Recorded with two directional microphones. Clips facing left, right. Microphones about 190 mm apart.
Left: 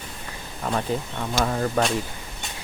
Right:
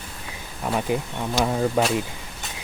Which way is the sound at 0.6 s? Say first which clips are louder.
Right 2 dB; 10° right (ahead or behind).